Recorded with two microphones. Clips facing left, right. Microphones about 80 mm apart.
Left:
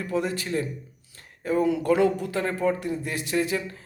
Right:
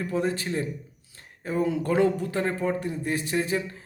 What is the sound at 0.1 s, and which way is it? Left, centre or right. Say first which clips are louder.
A man's voice: left 2 dB; right.